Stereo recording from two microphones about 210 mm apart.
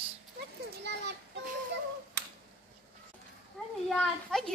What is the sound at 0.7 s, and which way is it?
Children playing, 55° right (ahead or behind).